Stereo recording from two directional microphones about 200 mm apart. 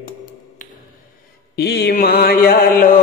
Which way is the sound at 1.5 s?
55° left (ahead or behind).